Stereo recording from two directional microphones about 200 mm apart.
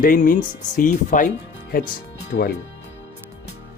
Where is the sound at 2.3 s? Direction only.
55° left (ahead or behind).